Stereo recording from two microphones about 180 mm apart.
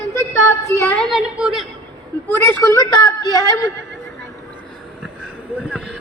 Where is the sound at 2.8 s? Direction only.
20° left (ahead or behind).